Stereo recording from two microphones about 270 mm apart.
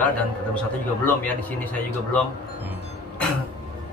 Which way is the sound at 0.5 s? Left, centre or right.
Centre.